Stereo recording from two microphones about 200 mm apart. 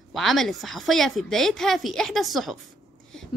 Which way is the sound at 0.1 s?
Centre (ahead or behind).